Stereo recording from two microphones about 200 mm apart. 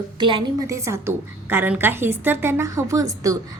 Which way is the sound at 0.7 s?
15° right (ahead or behind).